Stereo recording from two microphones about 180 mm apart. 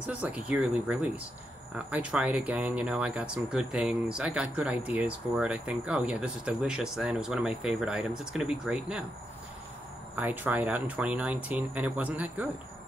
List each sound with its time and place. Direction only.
0.0 s speech: 5° right (ahead or behind)
10.1 s speech: 10° right (ahead or behind)